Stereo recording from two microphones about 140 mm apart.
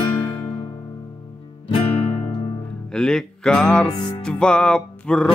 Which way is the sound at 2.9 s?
5° left (ahead or behind).